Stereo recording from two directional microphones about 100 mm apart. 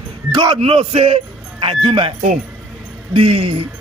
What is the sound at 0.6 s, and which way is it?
Speech, 85° right.